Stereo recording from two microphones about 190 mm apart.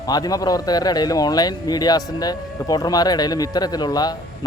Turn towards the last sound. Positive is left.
turn(degrees=20)  # may be behind; listen again after turning